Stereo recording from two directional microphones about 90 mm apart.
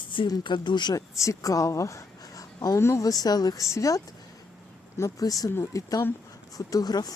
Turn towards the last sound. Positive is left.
turn(degrees=45)  # may be behind; listen again after turning